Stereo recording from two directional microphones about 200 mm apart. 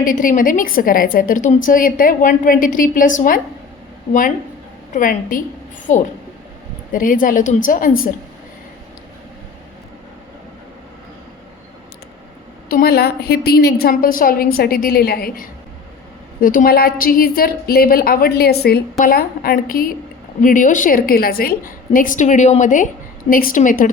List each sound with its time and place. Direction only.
0.0 s a woman's voice: 45° left (ahead or behind)
4.9 s a woman's voice: 45° left (ahead or behind)
12.6 s a woman's voice: 50° left (ahead or behind)